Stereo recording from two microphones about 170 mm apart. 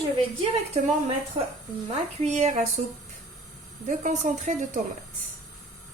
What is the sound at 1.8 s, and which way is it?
Speech, 35° right (ahead or behind).